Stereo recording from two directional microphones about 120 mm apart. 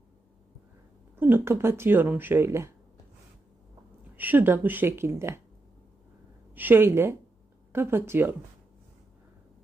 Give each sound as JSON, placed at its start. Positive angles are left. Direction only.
{"t": 1.1, "sound": "speech", "side_deg": -20}
{"t": 4.2, "sound": "a woman's voice", "side_deg": -15}
{"t": 6.5, "sound": "speech", "side_deg": -15}